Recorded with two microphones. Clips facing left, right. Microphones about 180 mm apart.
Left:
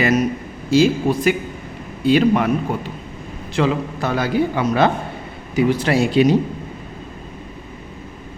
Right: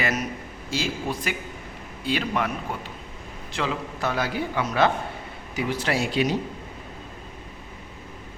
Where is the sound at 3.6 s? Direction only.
55° left (ahead or behind).